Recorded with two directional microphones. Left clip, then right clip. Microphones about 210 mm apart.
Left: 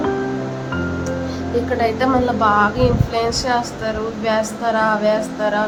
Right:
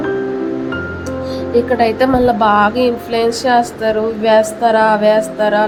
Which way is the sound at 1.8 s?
15° right (ahead or behind).